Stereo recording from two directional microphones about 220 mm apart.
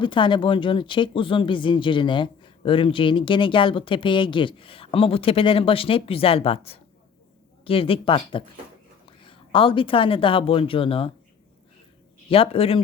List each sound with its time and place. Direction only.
0.0 s speech: 20° left (ahead or behind)
12.3 s speech: 25° left (ahead or behind)